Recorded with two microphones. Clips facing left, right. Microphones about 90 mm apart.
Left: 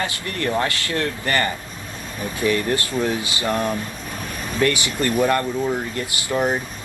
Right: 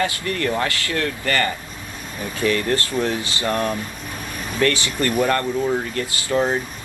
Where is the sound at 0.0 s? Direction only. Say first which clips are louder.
Right 3 dB; 25° left (ahead or behind).